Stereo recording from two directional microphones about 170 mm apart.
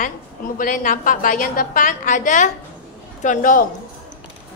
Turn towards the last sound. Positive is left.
turn(degrees=50)  # may be behind; listen again after turning